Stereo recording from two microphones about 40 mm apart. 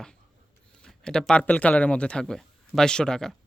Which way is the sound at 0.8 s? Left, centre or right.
Centre.